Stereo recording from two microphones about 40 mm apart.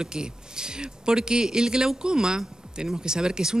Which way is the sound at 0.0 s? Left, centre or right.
Centre.